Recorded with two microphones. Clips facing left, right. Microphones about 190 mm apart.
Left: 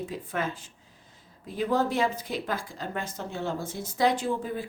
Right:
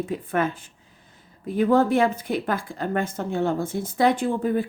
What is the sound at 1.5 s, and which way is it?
Speech, 55° right (ahead or behind).